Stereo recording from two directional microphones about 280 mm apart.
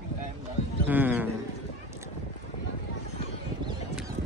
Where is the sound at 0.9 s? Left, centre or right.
Centre.